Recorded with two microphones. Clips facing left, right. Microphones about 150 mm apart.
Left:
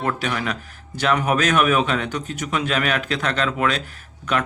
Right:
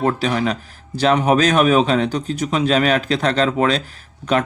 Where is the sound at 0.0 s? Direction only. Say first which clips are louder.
Right 6 dB; 35° right (ahead or behind).